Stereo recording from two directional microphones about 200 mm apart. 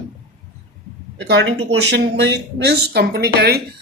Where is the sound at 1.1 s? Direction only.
65° right (ahead or behind).